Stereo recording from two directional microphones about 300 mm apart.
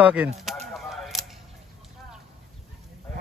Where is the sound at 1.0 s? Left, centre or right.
Centre.